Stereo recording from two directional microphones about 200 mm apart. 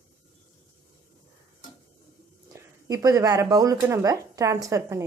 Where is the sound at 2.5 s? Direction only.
15° right (ahead or behind).